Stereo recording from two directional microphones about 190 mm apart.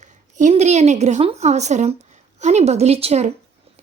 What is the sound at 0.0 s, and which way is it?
A woman's voice, 40° right (ahead or behind).